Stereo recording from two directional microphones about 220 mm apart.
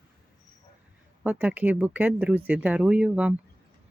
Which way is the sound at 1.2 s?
5° right (ahead or behind).